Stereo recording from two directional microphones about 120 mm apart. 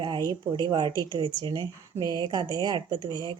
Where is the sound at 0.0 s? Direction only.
35° right (ahead or behind).